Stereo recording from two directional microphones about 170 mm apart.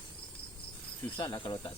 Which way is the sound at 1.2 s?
25° left (ahead or behind).